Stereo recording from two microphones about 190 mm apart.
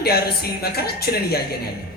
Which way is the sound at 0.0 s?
55° left (ahead or behind).